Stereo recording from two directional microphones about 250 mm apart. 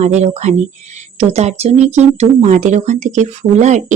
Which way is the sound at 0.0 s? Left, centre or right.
Right.